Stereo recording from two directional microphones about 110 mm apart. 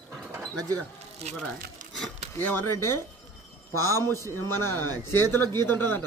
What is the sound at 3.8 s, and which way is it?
A man's voice, 25° left (ahead or behind).